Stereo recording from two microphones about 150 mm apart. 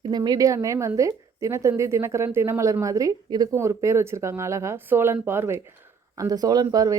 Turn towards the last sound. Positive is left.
turn(degrees=-25)  # may be behind; listen again after turning